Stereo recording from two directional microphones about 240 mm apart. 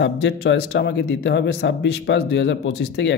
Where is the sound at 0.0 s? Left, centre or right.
Left.